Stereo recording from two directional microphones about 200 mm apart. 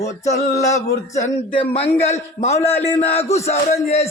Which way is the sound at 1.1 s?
30° left (ahead or behind).